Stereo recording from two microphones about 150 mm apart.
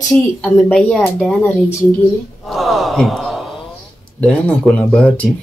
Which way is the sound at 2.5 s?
Centre (ahead or behind).